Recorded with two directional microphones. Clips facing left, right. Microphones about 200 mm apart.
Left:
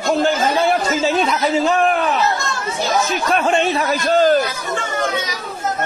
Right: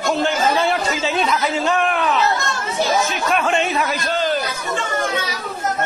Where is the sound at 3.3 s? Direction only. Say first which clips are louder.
Left 3 dB; 40° left (ahead or behind).